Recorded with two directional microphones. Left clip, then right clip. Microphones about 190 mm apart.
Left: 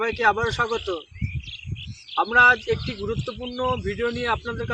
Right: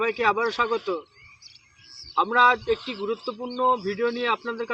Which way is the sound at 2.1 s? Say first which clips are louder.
Left 2 dB; 10° left (ahead or behind).